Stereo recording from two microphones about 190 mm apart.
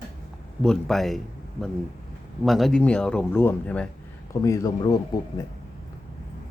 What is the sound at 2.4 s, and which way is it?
Speech, centre (ahead or behind).